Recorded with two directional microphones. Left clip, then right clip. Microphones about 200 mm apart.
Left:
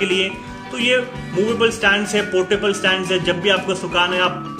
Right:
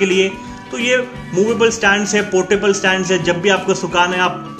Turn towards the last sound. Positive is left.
turn(degrees=-45)  # may be behind; listen again after turning